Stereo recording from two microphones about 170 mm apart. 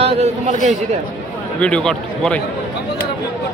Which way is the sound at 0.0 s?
35° right (ahead or behind).